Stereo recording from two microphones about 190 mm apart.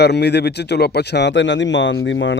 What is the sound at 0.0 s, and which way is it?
Speech, 60° left (ahead or behind).